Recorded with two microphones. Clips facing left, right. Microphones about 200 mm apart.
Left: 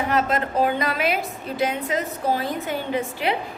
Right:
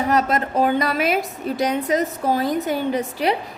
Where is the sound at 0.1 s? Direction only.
45° right (ahead or behind).